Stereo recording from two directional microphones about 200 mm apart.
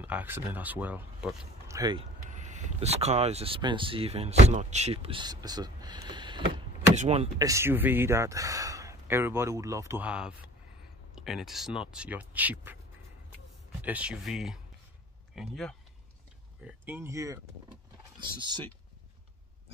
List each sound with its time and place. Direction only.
0.0 s speech: 10° right (ahead or behind)
2.3 s speech: 35° right (ahead or behind)
7.3 s speech: 15° right (ahead or behind)
13.7 s speech: 10° right (ahead or behind)
16.6 s speech: 10° right (ahead or behind)